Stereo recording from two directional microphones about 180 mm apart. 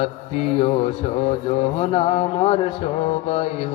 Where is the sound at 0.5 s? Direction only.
30° left (ahead or behind).